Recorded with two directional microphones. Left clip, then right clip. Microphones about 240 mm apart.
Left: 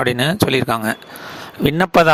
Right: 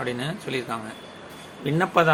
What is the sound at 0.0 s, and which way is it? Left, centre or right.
Speech, left.